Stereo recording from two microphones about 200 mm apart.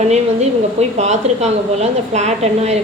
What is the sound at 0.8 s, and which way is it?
A woman's voice, 35° right (ahead or behind).